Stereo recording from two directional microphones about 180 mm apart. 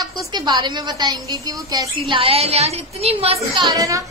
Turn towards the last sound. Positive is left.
turn(degrees=-20)  # may be behind; listen again after turning